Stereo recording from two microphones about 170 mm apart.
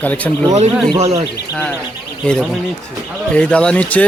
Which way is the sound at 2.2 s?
5° left (ahead or behind).